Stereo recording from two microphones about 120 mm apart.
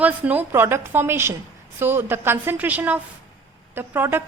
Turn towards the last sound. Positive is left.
turn(degrees=-20)  # may be behind; listen again after turning